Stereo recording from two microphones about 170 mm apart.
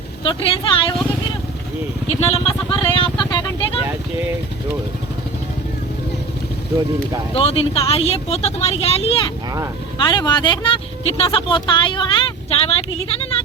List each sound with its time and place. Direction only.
0.2 s speech: 30° left (ahead or behind)
2.0 s speech: 35° left (ahead or behind)
7.3 s speech: 35° left (ahead or behind)
10.0 s speech: 25° left (ahead or behind)